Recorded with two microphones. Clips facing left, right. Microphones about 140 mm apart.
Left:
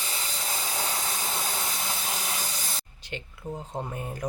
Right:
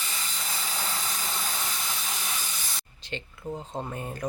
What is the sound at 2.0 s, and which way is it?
Steam, 40° left (ahead or behind).